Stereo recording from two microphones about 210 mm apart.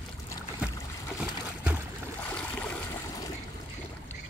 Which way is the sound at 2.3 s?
5° left (ahead or behind).